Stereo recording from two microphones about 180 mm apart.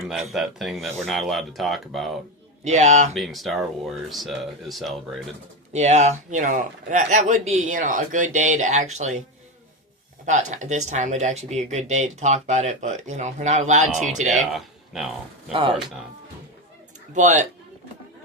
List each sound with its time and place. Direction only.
0.0 s speech: centre (ahead or behind)
2.6 s a man's voice: 40° right (ahead or behind)
3.2 s speech: centre (ahead or behind)
5.7 s a man's voice: 40° right (ahead or behind)
10.2 s a man's voice: 40° right (ahead or behind)
14.5 s speech: centre (ahead or behind)
17.2 s a man's voice: 40° right (ahead or behind)